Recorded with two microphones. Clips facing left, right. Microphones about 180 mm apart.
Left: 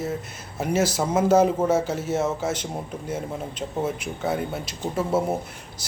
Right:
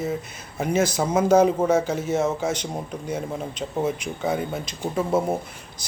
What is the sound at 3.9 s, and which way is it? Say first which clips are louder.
A man's voice: right 1 dB; 5° left (ahead or behind).